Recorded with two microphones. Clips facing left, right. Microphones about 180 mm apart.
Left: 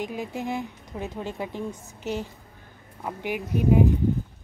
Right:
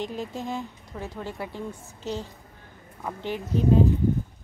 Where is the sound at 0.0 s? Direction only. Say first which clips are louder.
Left 1 dB; 10° left (ahead or behind).